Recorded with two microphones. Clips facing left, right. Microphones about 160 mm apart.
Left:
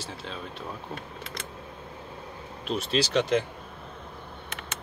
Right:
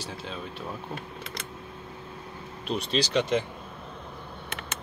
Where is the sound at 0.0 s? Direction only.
Centre (ahead or behind).